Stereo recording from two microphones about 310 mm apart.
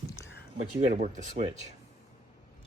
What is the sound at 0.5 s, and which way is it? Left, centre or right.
Speech, right.